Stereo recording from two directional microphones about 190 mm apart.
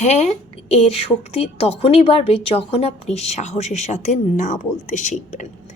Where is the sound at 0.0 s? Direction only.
35° left (ahead or behind).